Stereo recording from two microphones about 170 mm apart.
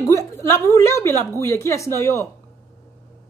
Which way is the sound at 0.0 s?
20° left (ahead or behind).